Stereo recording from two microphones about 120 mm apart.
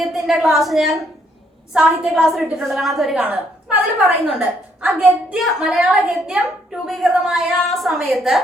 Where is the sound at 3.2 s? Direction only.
10° right (ahead or behind).